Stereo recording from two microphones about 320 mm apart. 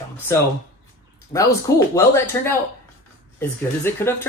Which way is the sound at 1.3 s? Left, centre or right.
Centre.